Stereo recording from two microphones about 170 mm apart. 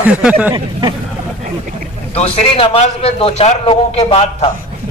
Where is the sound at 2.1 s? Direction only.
35° left (ahead or behind).